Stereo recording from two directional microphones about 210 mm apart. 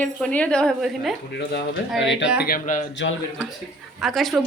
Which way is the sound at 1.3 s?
50° left (ahead or behind).